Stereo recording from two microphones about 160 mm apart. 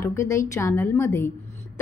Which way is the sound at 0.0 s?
15° left (ahead or behind).